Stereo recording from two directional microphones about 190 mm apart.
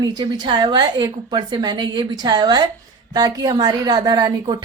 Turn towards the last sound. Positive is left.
turn(degrees=-20)  # may be behind; listen again after turning